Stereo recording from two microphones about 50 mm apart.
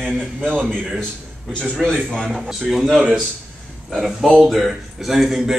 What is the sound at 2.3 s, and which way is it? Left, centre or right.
Speech, centre.